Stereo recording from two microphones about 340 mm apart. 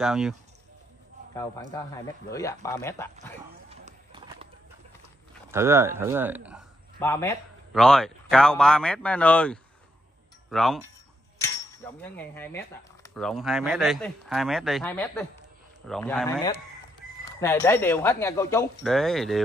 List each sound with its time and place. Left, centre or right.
0.0 s speech: centre
1.3 s speech: centre
3.7 s horse: centre
5.5 s speech: centre
7.0 s speech: centre
12.0 s speech: centre